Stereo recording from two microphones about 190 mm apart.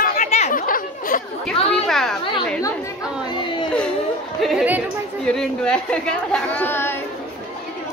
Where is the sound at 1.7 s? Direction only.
Centre (ahead or behind).